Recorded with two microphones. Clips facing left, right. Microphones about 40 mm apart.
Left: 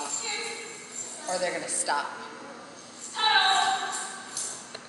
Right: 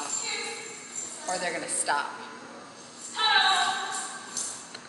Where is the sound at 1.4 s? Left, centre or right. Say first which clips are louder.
Left 3 dB; centre.